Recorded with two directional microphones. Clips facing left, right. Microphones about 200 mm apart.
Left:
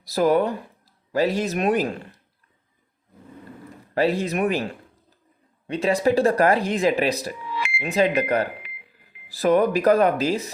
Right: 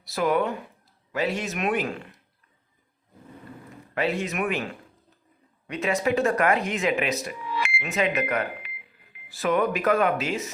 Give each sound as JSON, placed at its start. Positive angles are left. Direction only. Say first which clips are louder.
{"t": 0.0, "sound": "speech", "louder": "left 5 dB", "side_deg": 35}
{"t": 3.9, "sound": "speech", "louder": "left 5 dB", "side_deg": 35}